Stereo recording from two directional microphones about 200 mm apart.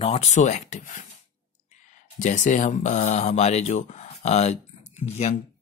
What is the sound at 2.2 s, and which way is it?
Speech, 35° left (ahead or behind).